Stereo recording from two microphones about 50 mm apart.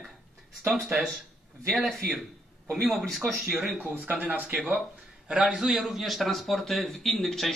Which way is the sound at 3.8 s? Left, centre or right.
Right.